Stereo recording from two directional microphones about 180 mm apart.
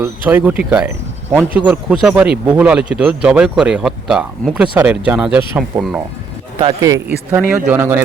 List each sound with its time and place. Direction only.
0.0 s speech: 10° right (ahead or behind)
5.7 s speech: 25° right (ahead or behind)